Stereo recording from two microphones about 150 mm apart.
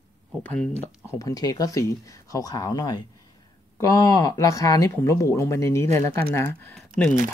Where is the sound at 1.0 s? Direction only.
20° left (ahead or behind).